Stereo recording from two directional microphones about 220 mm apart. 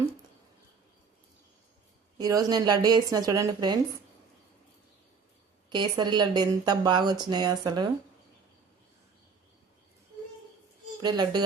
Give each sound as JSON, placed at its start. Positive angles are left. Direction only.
{"t": 2.1, "sound": "a woman's voice", "side_deg": -15}
{"t": 5.6, "sound": "speech", "side_deg": -20}
{"t": 11.0, "sound": "speech", "side_deg": -20}